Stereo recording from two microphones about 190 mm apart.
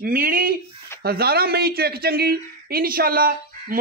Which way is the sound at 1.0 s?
55° right (ahead or behind).